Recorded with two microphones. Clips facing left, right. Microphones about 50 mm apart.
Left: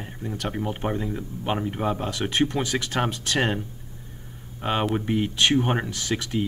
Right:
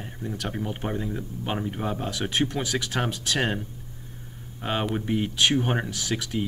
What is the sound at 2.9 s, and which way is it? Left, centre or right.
Speech, centre.